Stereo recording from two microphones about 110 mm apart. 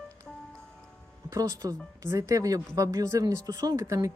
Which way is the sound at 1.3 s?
35° right (ahead or behind).